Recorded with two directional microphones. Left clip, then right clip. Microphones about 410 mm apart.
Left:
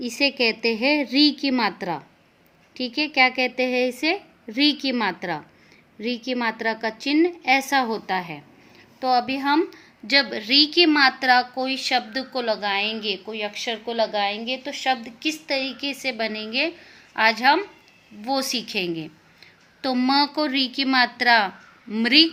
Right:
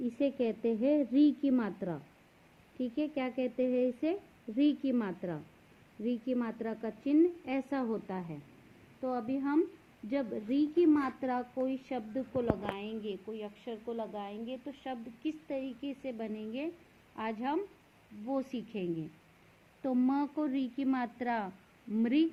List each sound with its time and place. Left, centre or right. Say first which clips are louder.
0.2 s a woman's voice: left 12 dB; centre
12.8 s a woman's voice: left 15 dB; left
13.9 s a woman's voice: left 19 dB; centre
18.7 s a woman's voice: left 12 dB; centre
20.0 s a woman's voice: left 13 dB; centre